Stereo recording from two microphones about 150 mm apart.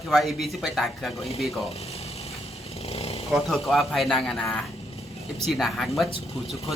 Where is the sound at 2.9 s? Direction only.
40° left (ahead or behind).